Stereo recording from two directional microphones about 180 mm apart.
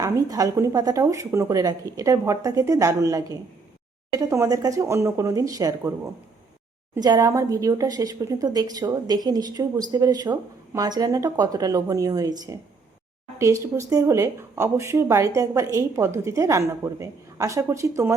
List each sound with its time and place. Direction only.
0.0 s speech: 20° right (ahead or behind)
6.9 s speech: 20° right (ahead or behind)